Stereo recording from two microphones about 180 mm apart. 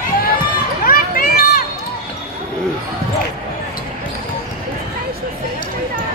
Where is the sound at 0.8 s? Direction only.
55° left (ahead or behind).